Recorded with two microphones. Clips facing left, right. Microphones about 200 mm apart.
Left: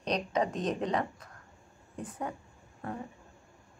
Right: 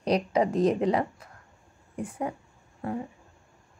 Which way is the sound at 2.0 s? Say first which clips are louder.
Right 5 dB; 30° right (ahead or behind).